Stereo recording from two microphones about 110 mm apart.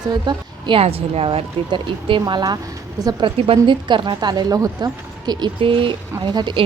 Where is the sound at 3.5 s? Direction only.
45° right (ahead or behind).